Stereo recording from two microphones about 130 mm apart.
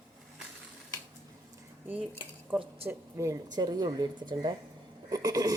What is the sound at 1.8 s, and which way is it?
Cutlery, 10° right (ahead or behind).